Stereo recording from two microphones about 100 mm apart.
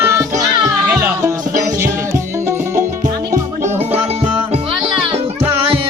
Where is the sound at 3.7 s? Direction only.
90° right.